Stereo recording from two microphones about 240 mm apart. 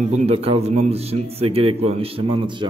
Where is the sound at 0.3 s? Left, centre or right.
Right.